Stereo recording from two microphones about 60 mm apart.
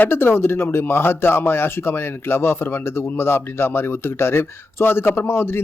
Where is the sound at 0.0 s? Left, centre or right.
Left.